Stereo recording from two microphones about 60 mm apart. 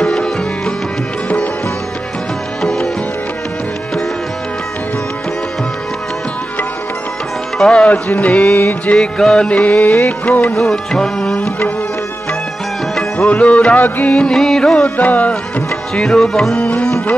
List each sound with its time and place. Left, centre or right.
0.0 s music: centre
2.6 s music: centre
7.5 s music: centre
8.1 s music: left
8.9 s music: centre
9.5 s music: left
10.5 s music: centre
13.3 s music: left
13.7 s music: left
14.1 s music: centre
15.0 s music: left
15.9 s music: centre
16.5 s music: left